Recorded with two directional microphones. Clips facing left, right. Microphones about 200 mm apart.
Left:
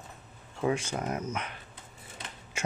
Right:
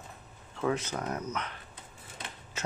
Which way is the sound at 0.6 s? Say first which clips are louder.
Left 1 dB; 10° left (ahead or behind).